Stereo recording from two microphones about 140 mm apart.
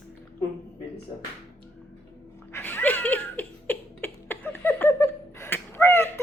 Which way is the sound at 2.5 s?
15° left (ahead or behind).